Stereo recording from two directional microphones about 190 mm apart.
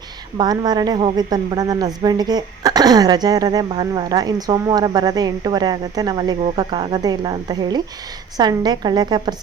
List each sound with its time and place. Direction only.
0.3 s a woman's voice: 20° right (ahead or behind)